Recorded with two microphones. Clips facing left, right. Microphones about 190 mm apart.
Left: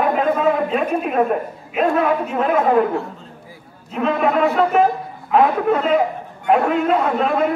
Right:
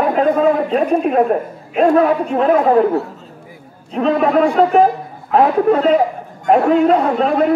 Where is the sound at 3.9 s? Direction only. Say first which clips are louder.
Right 4 dB; 35° right (ahead or behind).